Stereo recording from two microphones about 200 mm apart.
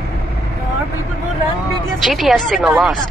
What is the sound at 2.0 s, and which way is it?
Speech, centre (ahead or behind).